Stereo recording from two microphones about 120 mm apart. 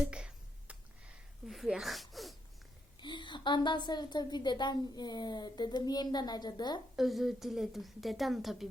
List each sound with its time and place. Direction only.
0.1 s a sound: 10° right (ahead or behind)
3.0 s a woman's voice: 40° left (ahead or behind)
6.9 s a woman's voice: centre (ahead or behind)